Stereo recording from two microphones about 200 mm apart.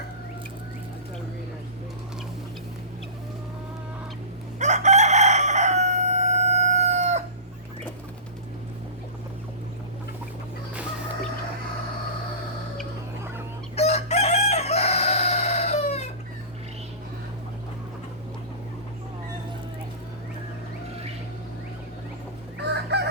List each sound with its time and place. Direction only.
4.6 s crowing: 35° right (ahead or behind)
13.7 s crowing: 30° left (ahead or behind)
22.5 s chicken: 55° right (ahead or behind)